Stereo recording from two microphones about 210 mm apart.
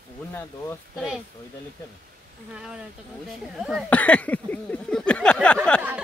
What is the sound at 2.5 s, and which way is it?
Speech, 5° right (ahead or behind).